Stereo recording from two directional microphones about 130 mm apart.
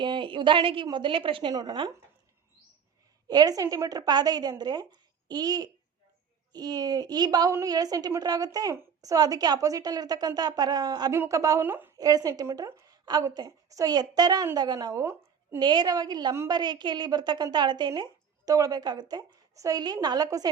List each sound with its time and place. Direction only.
0.0 s a woman's voice: 40° right (ahead or behind)
3.2 s a woman's voice: 30° right (ahead or behind)
11.9 s a woman's voice: 30° right (ahead or behind)